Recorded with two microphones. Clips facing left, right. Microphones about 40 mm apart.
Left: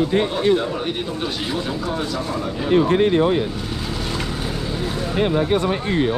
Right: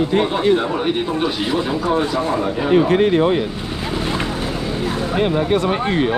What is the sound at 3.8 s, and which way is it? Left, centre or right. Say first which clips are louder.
Vehicle: right 7 dB; right.